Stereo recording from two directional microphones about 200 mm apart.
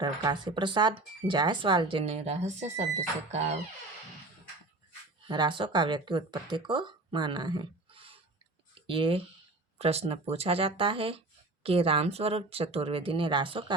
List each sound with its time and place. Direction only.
0.0 s speech: 20° right (ahead or behind)
5.3 s speech: 25° right (ahead or behind)